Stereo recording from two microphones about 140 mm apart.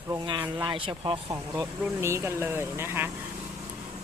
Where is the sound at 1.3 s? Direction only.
20° right (ahead or behind).